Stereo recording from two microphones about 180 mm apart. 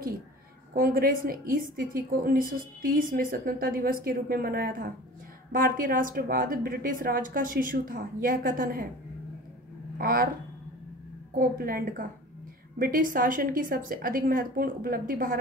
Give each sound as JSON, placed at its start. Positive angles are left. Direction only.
{"t": 0.7, "sound": "a woman's voice", "side_deg": -55}
{"t": 9.9, "sound": "a woman's voice", "side_deg": -55}
{"t": 11.3, "sound": "a woman's voice", "side_deg": -55}